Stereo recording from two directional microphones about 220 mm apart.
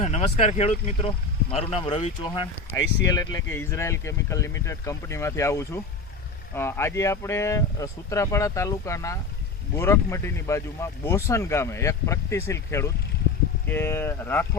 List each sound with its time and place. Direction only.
0.0 s speech: 30° left (ahead or behind); by 14.4 s 10° left (ahead or behind)